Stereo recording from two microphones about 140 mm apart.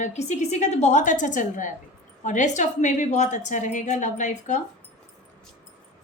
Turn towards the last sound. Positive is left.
turn(degrees=60)  # may be behind; listen again after turning